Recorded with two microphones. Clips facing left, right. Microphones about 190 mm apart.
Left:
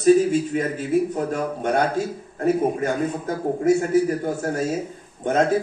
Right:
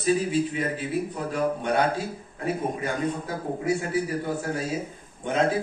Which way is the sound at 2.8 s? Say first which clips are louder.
Left 5 dB; 45° left (ahead or behind).